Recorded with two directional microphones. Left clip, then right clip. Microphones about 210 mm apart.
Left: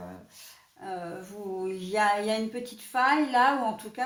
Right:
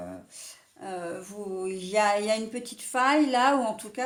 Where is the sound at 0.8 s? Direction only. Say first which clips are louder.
Right 1 dB; 50° right (ahead or behind).